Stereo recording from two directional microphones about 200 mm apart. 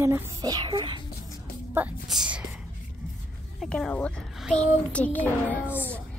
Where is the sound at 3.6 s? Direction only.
5° left (ahead or behind).